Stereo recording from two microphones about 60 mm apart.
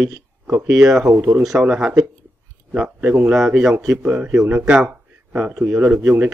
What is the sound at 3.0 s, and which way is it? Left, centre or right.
Speech, right.